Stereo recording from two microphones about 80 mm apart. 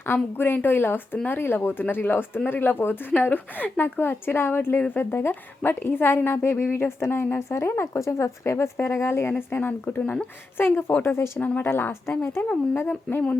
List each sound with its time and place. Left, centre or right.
0.0 s a woman's voice: left